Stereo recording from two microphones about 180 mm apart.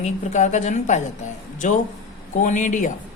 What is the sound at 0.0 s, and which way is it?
A woman's voice, 40° left (ahead or behind).